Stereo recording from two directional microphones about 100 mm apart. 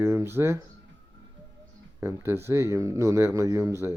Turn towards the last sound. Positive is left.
turn(degrees=-30)  # may be behind; listen again after turning